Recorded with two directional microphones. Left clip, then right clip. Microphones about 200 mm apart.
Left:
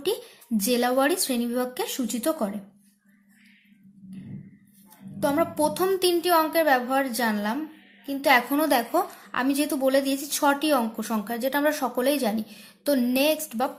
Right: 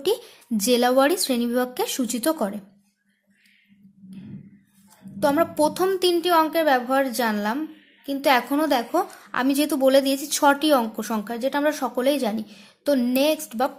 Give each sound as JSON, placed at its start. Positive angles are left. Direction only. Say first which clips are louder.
{"t": 0.0, "sound": "speech", "louder": "right 4 dB", "side_deg": -20}
{"t": 5.2, "sound": "a woman's voice", "louder": "right 3 dB", "side_deg": -25}